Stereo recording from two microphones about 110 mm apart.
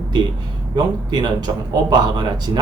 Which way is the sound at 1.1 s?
40° right (ahead or behind).